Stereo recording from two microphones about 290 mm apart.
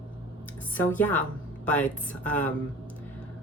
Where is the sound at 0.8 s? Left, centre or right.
Centre.